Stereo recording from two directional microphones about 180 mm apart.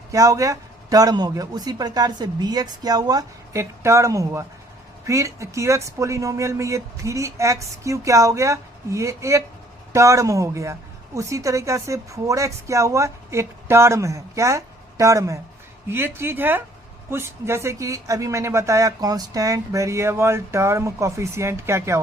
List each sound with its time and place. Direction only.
0.1 s a man's voice: 20° right (ahead or behind)